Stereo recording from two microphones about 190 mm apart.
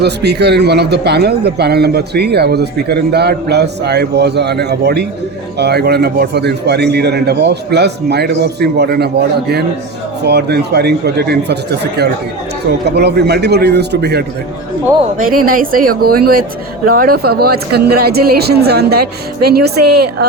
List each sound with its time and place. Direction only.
0.0 s speech: 60° right (ahead or behind)
13.0 s speech: 60° right (ahead or behind)
15.2 s speech: 50° right (ahead or behind)